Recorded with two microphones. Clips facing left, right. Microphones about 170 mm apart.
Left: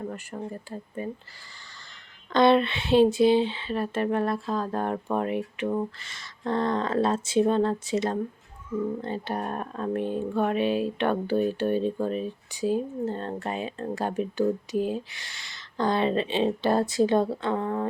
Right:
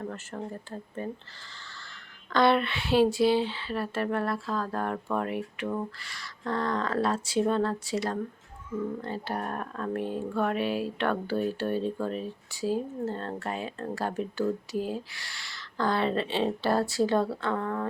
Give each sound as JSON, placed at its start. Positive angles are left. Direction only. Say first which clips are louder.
{"t": 0.0, "sound": "speech", "louder": "left 2 dB", "side_deg": 15}
{"t": 2.3, "sound": "speech", "louder": "left 4 dB", "side_deg": 20}